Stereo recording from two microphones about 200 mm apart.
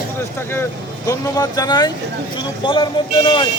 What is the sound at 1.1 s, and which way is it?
Speech, 20° left (ahead or behind).